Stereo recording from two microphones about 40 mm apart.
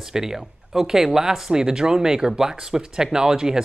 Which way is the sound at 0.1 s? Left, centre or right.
Centre.